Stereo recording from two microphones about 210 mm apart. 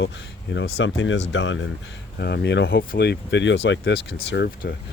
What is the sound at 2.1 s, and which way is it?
Speech, 50° left (ahead or behind).